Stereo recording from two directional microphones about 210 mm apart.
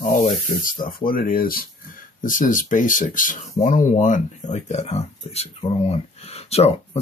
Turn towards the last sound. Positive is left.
turn(degrees=30)  # may be behind; listen again after turning